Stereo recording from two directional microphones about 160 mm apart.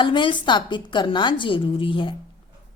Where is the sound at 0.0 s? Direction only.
30° left (ahead or behind).